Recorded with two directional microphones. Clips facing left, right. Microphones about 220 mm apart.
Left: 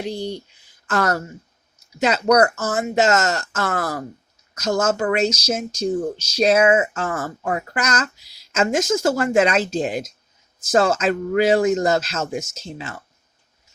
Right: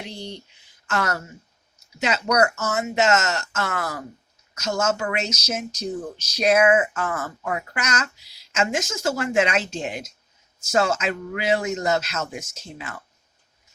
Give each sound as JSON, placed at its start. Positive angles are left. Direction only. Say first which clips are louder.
{"t": 0.0, "sound": "speech", "louder": "left 9 dB", "side_deg": 35}
{"t": 2.0, "sound": "speech", "louder": "left 5 dB", "side_deg": 40}